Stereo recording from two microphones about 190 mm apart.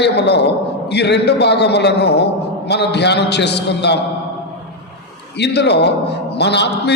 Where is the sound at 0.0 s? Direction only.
60° left (ahead or behind).